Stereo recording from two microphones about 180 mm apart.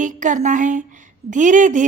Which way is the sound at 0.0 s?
45° right (ahead or behind).